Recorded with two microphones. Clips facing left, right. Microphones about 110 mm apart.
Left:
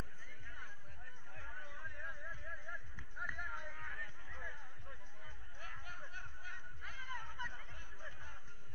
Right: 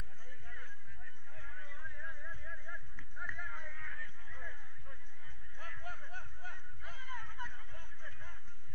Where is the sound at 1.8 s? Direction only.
15° left (ahead or behind).